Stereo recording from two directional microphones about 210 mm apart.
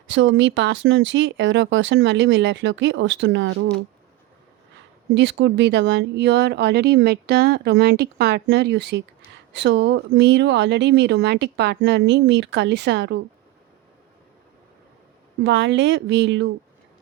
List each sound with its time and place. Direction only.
0.1 s speech: 65° right (ahead or behind)
5.1 s speech: 55° right (ahead or behind)
15.4 s speech: 60° right (ahead or behind)